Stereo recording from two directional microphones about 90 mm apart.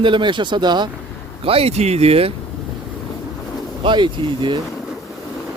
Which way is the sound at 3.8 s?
60° right (ahead or behind).